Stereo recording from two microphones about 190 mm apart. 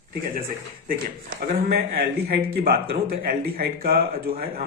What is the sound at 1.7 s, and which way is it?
A man's voice, 55° right (ahead or behind).